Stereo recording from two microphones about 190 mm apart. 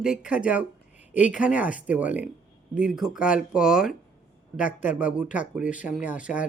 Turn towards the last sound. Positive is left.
turn(degrees=-5)  # may be behind; listen again after turning